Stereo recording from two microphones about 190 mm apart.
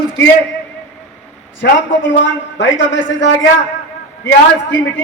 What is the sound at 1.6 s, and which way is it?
A man's voice, 75° left (ahead or behind).